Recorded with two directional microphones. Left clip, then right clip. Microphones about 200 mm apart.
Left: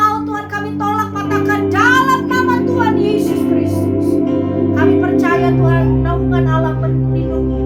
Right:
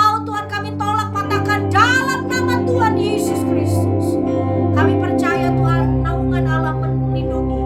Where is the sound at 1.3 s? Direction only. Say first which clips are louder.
Left 2 dB; 20° right (ahead or behind).